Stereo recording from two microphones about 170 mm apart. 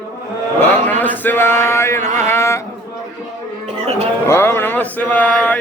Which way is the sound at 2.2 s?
15° left (ahead or behind).